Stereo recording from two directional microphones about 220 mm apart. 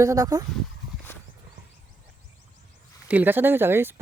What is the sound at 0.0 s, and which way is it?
Speech, 15° right (ahead or behind).